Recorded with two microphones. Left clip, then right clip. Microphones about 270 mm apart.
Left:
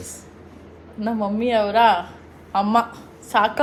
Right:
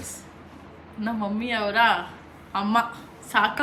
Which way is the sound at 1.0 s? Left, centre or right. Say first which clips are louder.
Left 6 dB; centre.